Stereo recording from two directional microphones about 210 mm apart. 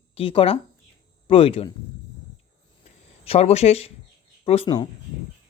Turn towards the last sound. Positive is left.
turn(degrees=25)  # may be behind; listen again after turning